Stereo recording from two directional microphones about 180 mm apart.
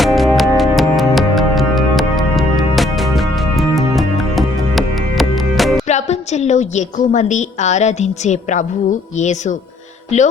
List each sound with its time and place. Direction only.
0.0 s music: centre (ahead or behind)
5.9 s a woman's voice: 40° left (ahead or behind)